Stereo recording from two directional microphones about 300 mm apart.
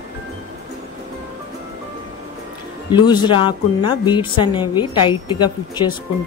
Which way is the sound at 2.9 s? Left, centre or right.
Centre.